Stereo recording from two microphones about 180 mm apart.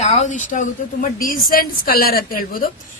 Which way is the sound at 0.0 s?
40° left (ahead or behind).